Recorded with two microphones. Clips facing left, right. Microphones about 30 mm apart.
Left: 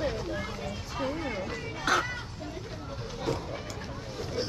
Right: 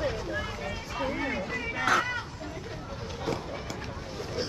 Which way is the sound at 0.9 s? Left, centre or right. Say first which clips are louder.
Right 2 dB; right.